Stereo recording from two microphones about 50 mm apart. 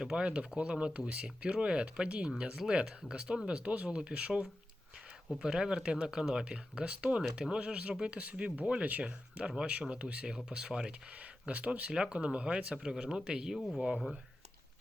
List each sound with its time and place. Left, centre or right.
0.0 s speech: centre
11.2 s speech: right
11.9 s speech: centre
13.6 s speech: centre